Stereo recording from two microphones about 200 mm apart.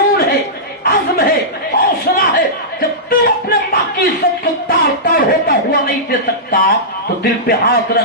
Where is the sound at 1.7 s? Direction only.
50° left (ahead or behind).